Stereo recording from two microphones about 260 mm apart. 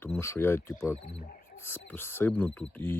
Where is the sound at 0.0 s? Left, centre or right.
Centre.